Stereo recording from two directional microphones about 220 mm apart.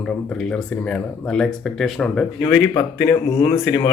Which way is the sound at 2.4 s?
15° left (ahead or behind).